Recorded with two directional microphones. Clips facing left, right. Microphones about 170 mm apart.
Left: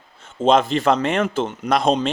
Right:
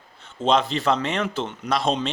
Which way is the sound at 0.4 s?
50° left (ahead or behind).